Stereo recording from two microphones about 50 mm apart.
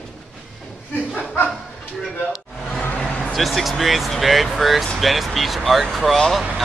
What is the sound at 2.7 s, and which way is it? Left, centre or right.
Vehicle, centre.